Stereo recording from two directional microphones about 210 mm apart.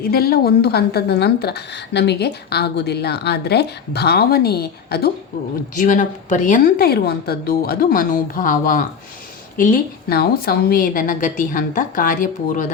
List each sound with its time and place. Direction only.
0.0 s a woman's voice: 45° left (ahead or behind)
5.7 s a woman's voice: 40° left (ahead or behind)